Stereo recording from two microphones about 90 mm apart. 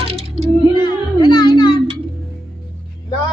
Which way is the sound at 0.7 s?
60° left (ahead or behind).